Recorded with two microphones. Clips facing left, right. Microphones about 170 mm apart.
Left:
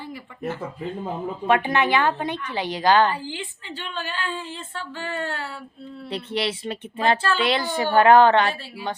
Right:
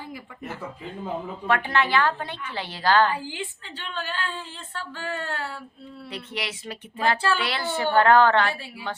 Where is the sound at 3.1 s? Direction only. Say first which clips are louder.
Left 2 dB; 10° right (ahead or behind).